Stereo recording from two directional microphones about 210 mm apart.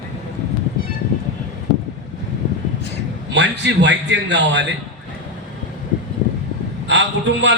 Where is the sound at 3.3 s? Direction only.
55° right (ahead or behind).